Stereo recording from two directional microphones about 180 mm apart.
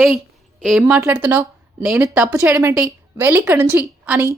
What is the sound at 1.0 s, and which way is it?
A woman's voice, 10° right (ahead or behind).